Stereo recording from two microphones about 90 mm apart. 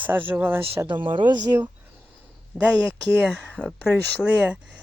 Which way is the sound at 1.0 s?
65° right (ahead or behind).